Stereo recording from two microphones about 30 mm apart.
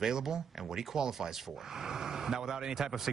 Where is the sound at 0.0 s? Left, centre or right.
Centre.